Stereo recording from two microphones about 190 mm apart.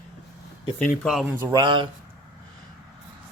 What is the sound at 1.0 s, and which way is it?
Speech, centre (ahead or behind).